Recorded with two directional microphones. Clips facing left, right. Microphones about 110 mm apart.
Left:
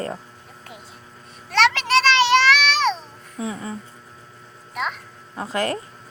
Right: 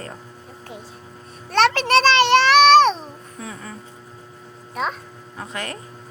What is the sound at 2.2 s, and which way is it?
Child singing, 50° right (ahead or behind).